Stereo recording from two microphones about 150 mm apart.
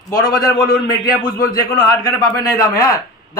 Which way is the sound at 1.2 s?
75° left (ahead or behind).